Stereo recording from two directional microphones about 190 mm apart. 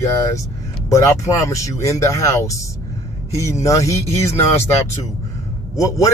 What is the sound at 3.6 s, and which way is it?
Speech, 15° left (ahead or behind).